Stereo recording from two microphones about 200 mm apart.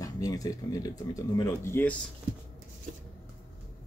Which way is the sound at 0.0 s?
15° left (ahead or behind).